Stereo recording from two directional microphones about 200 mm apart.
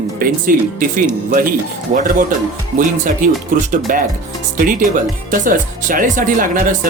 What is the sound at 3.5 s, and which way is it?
Speech, 40° right (ahead or behind).